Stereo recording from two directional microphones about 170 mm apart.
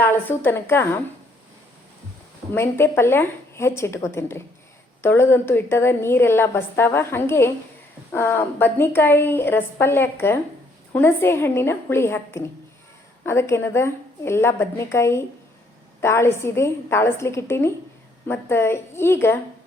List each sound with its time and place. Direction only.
0.0 s a woman's voice: 10° left (ahead or behind)
2.5 s a woman's voice: 15° left (ahead or behind)